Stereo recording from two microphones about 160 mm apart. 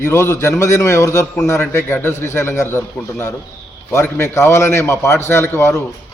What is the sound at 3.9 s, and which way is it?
A man's voice, 15° left (ahead or behind).